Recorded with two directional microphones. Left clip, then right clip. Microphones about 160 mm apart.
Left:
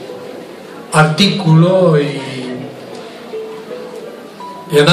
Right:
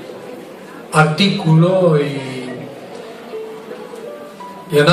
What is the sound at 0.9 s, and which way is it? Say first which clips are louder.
Speech: left 2 dB; 15° right (ahead or behind).